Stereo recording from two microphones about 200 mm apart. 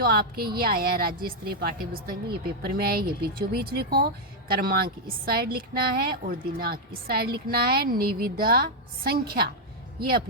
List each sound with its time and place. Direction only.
0.0 s speech: 50° right (ahead or behind)